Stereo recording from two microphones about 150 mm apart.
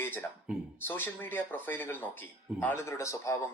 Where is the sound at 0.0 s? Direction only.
15° left (ahead or behind).